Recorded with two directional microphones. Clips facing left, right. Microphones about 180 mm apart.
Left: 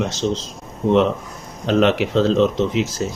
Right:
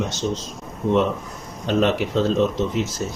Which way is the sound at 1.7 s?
90° left.